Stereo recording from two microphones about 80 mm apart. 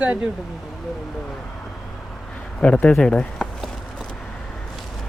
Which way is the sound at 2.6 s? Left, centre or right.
Centre.